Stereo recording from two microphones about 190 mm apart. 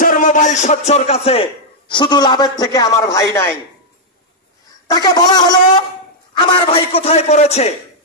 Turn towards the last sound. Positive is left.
turn(degrees=35)  # may be behind; listen again after turning